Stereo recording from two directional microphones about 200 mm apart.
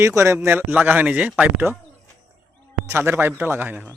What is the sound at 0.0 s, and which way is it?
Speech, 15° right (ahead or behind).